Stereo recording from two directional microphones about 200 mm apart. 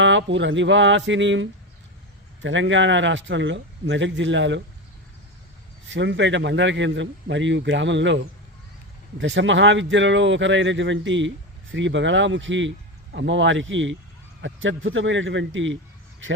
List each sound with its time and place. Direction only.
0.0 s a man's voice: 65° right (ahead or behind)
5.9 s speech: 65° right (ahead or behind)
9.2 s a man's voice: 65° right (ahead or behind)